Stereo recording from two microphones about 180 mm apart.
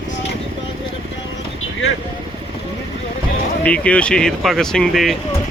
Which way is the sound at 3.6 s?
5° left (ahead or behind).